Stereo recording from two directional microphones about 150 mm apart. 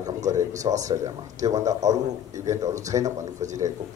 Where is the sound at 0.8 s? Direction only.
20° right (ahead or behind).